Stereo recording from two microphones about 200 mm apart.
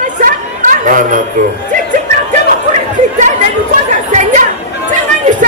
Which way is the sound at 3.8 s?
40° right (ahead or behind).